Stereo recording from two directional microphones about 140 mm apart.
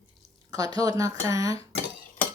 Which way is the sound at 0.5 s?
25° right (ahead or behind).